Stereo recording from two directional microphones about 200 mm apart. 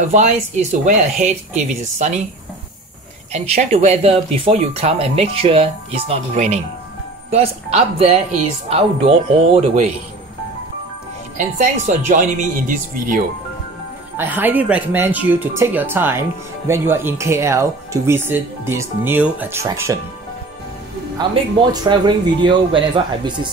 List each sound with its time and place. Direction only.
0.1 s speech: 35° right (ahead or behind)
3.3 s speech: 30° right (ahead or behind)
11.5 s speech: 40° right (ahead or behind)
14.1 s speech: 10° right (ahead or behind)
21.8 s speech: 20° right (ahead or behind)